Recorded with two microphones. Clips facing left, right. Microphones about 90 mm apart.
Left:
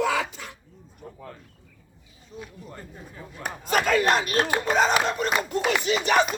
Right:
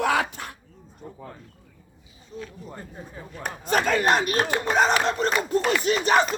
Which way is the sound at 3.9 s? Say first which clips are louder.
Even; 45° right (ahead or behind).